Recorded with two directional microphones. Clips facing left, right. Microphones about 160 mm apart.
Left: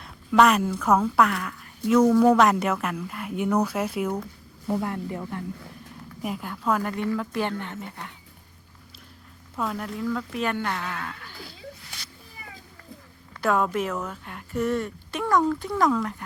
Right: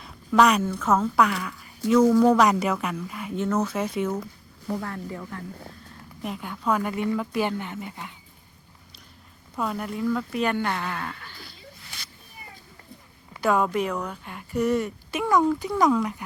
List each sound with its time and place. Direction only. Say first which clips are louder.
0.0 s a sound: left 1 dB; centre (ahead or behind)
0.6 s speech: left 1 dB; 10° left (ahead or behind)
1.0 s speech: even; centre (ahead or behind)
3.3 s speech: left 1 dB; 15° left (ahead or behind)
4.7 s speech: left 3 dB; 20° left (ahead or behind)
6.2 s speech: even; centre (ahead or behind)
9.6 s speech: right 1 dB; 5° right (ahead or behind)
13.4 s speech: right 1 dB; centre (ahead or behind)